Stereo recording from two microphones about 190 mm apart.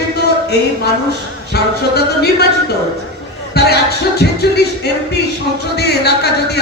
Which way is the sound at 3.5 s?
60° left (ahead or behind).